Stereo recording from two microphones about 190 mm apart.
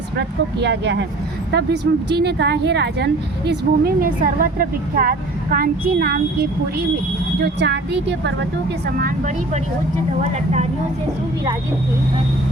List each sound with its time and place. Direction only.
0.2 s speech: 65° right (ahead or behind)
9.0 s speech: 50° right (ahead or behind)